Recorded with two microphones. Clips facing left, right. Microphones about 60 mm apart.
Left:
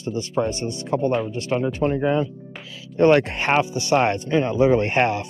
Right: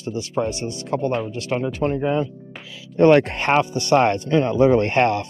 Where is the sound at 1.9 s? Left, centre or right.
Left.